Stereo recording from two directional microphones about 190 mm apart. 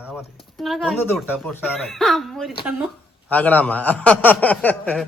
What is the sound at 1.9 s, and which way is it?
A man's voice, centre (ahead or behind).